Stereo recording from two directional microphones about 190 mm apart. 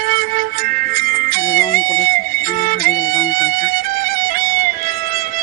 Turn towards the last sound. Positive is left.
turn(degrees=-50)  # may be behind; listen again after turning